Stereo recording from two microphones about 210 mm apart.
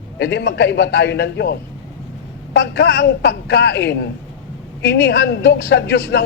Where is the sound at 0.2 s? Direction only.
50° left (ahead or behind).